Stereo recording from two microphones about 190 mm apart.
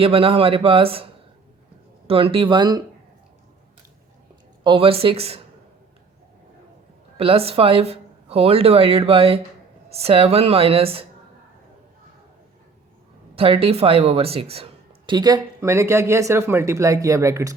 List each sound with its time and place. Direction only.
0.0 s speech: 30° right (ahead or behind)
2.0 s speech: 30° right (ahead or behind)
4.6 s speech: 25° right (ahead or behind)
7.2 s speech: 30° right (ahead or behind)
13.3 s speech: 30° right (ahead or behind)